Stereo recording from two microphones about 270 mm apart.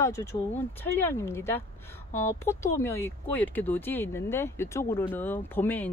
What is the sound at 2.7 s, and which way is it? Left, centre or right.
Speech, centre.